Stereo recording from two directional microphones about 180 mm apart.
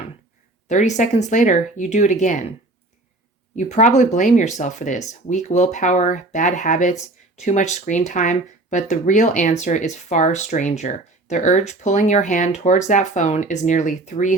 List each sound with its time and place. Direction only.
0.7 s speech: 40° left (ahead or behind)
3.5 s speech: 45° left (ahead or behind)